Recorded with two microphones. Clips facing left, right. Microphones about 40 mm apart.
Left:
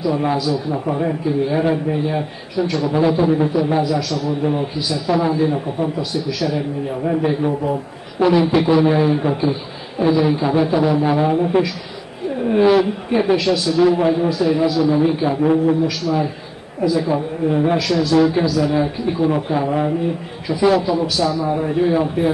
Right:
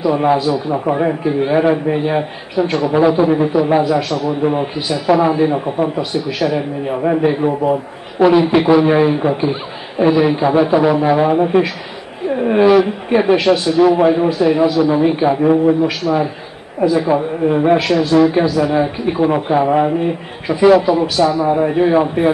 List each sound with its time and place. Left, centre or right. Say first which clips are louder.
0.0 s a man's voice: right 5 dB; right
2.8 s a man's voice: right 4 dB; right
9.5 s a man's voice: right 2 dB; right
12.6 s speech: right 3 dB; centre
13.1 s a man's voice: right 5 dB; right